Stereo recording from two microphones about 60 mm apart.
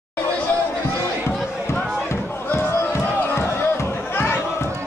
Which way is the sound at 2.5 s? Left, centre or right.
Left.